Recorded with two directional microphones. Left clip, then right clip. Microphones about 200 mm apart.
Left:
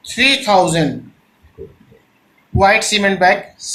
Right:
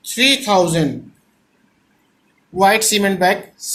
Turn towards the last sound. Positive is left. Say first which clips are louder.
# left 3 dB
turn(degrees=-45)  # may be behind; listen again after turning